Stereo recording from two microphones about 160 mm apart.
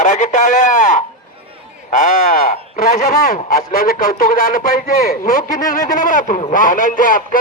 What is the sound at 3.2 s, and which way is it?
Speech, 65° left (ahead or behind).